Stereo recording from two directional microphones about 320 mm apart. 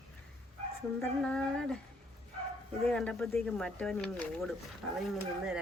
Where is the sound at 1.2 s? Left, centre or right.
Centre.